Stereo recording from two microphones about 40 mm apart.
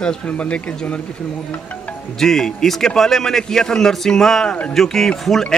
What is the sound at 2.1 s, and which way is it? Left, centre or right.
A man's voice, centre.